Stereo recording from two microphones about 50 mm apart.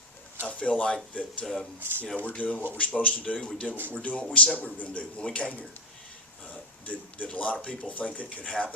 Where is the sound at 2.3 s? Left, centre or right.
Left.